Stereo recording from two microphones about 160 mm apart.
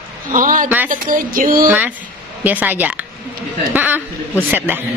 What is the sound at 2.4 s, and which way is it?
A man's voice, 10° right (ahead or behind).